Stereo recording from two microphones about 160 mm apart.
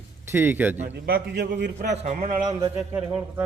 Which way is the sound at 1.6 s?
90° right.